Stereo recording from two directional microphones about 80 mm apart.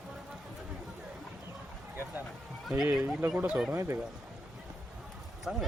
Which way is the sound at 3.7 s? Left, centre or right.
Right.